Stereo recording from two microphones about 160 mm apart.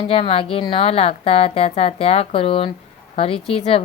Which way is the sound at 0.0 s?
35° left (ahead or behind).